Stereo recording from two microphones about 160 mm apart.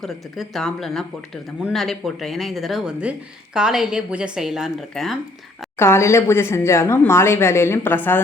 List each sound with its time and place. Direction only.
0.0 s speech: centre (ahead or behind)
5.8 s speech: 15° left (ahead or behind)